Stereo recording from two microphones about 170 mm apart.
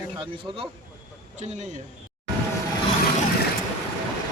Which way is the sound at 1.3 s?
45° right (ahead or behind).